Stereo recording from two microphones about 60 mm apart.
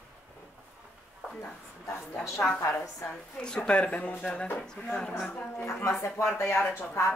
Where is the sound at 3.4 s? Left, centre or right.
Centre.